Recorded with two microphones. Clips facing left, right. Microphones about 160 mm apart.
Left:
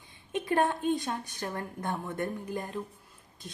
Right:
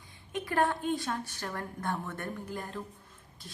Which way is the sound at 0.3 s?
20° left (ahead or behind).